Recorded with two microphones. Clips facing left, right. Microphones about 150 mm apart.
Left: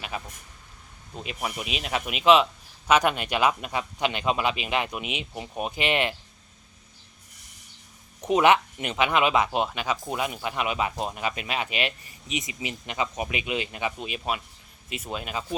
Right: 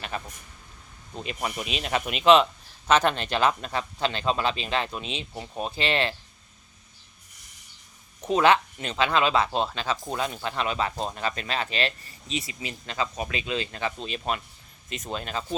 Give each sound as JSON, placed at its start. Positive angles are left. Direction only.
{"t": 0.1, "sound": "speech", "side_deg": 5}
{"t": 8.2, "sound": "speech", "side_deg": 15}